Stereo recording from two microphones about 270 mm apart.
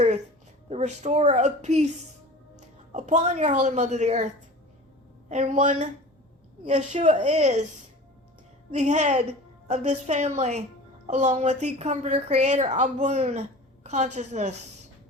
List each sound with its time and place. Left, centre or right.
0.7 s a woman's voice: right
5.3 s a woman's voice: right
8.7 s a woman's voice: right